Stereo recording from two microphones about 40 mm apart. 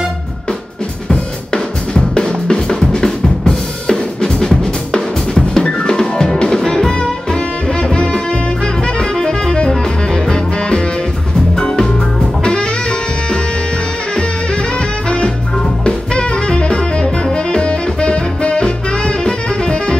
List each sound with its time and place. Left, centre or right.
1.1 s drum: left
4.2 s drum kit: centre
11.5 s music: centre